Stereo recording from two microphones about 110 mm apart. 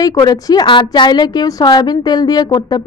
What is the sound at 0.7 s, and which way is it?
A woman's voice, 45° left (ahead or behind).